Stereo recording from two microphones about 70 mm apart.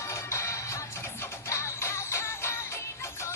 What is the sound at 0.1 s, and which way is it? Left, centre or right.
Music, left.